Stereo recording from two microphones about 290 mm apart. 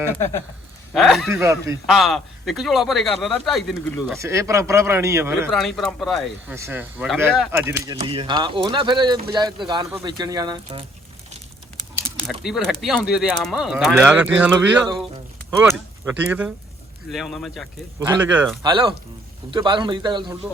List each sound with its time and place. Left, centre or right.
0.9 s speech: centre
12.1 s speech: centre
18.6 s speech: centre